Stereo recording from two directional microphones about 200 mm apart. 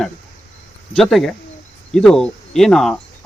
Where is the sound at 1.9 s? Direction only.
5° left (ahead or behind).